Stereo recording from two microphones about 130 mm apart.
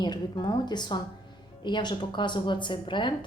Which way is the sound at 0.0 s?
35° left (ahead or behind).